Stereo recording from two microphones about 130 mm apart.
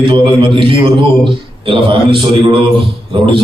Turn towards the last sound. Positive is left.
turn(degrees=-40)  # may be behind; listen again after turning